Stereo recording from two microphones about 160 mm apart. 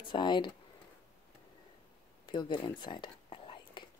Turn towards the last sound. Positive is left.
turn(degrees=30)  # may be behind; listen again after turning